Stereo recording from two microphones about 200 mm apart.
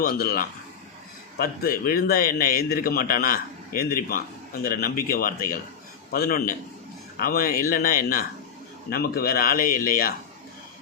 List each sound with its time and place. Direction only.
0.0 s speech: 50° left (ahead or behind)